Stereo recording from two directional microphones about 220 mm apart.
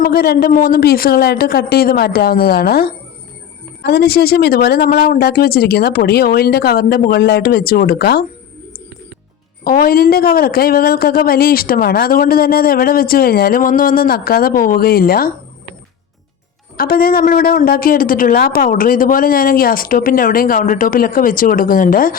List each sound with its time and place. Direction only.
0.0 s speech: 45° left (ahead or behind)
9.6 s speech: 40° left (ahead or behind)
16.7 s speech: 40° left (ahead or behind)